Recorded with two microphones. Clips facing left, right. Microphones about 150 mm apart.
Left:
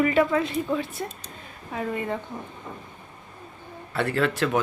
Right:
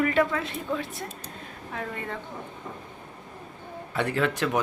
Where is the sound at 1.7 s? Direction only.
15° left (ahead or behind).